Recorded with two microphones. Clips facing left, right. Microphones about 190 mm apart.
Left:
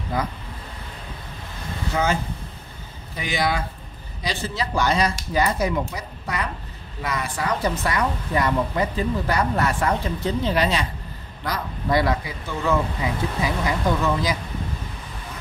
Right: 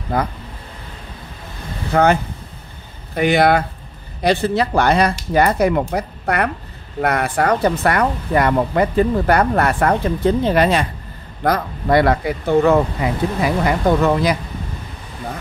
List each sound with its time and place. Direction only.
0.1 s speech: 60° right (ahead or behind)
1.9 s speech: 60° right (ahead or behind)
3.2 s speech: 60° right (ahead or behind)